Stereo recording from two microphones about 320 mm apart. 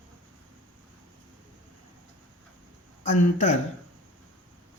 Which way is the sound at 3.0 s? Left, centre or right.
Left.